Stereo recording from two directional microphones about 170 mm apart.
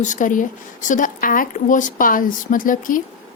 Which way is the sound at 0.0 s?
50° left (ahead or behind).